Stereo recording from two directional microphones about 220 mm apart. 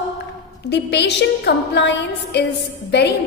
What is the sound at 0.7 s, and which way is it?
A woman's voice, 50° left (ahead or behind).